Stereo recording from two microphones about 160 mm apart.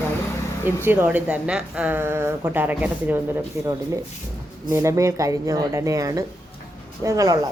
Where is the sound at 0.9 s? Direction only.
10° right (ahead or behind).